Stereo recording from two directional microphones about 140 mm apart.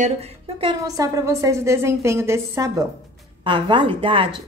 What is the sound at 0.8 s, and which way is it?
A woman's voice, 25° right (ahead or behind).